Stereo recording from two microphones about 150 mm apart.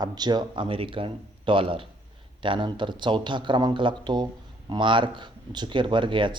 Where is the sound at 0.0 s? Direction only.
30° right (ahead or behind).